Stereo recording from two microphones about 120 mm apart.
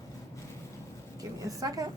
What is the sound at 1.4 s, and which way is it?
Speech, 30° right (ahead or behind).